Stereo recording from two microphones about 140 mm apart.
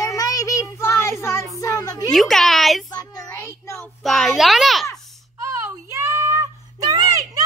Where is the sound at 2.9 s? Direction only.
30° left (ahead or behind).